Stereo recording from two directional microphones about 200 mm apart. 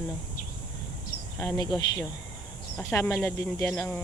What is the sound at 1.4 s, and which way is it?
Speech, 15° left (ahead or behind).